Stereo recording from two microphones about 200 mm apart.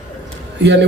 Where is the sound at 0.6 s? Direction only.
60° right (ahead or behind).